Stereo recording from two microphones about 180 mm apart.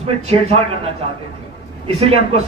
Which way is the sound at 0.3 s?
35° right (ahead or behind).